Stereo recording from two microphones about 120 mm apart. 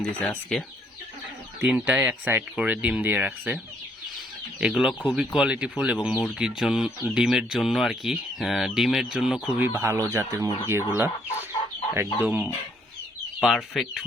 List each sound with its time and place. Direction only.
0.2 s speech: 10° left (ahead or behind)
1.6 s speech: 10° right (ahead or behind)
4.6 s speech: 5° right (ahead or behind)
9.6 s speech: 20° right (ahead or behind)
13.4 s speech: centre (ahead or behind)